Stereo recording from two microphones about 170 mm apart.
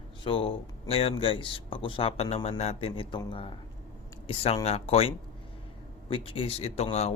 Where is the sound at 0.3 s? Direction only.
30° left (ahead or behind).